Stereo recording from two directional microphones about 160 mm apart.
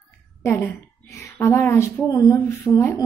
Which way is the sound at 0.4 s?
15° left (ahead or behind).